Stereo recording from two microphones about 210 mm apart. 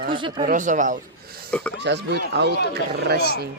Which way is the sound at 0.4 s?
35° right (ahead or behind).